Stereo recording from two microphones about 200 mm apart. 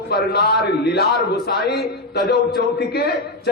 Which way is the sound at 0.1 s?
55° left (ahead or behind).